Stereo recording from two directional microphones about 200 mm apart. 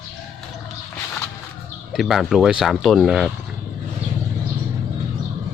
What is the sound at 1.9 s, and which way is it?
Speech, centre (ahead or behind).